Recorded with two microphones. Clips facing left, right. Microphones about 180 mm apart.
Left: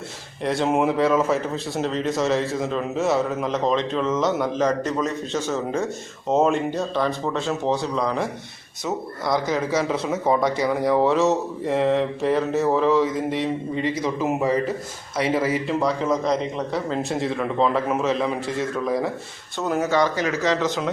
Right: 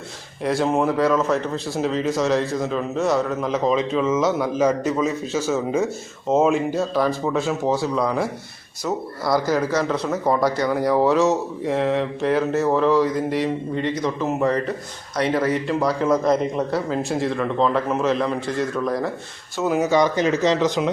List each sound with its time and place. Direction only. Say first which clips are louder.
0.4 s speech: right 1 dB; centre (ahead or behind); by 20.9 s 15° right (ahead or behind)